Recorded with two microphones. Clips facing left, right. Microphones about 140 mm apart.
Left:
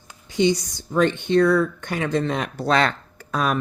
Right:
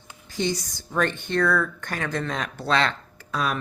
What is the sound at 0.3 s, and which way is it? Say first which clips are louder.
A woman's voice: left 7 dB; 20° left (ahead or behind).